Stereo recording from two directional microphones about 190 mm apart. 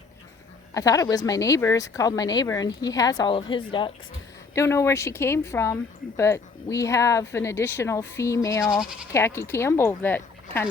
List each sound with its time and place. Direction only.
0.7 s speech: 20° left (ahead or behind)
4.5 s speech: 15° left (ahead or behind)
8.7 s speech: centre (ahead or behind)
9.1 s speech: 15° left (ahead or behind)